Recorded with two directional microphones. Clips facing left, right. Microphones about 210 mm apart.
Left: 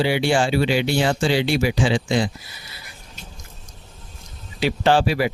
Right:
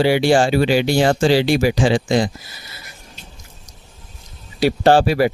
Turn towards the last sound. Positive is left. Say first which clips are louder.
# right 5 dB
turn(degrees=-45)  # may be behind; listen again after turning